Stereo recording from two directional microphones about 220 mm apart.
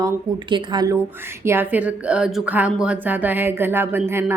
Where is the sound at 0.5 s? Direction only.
20° right (ahead or behind).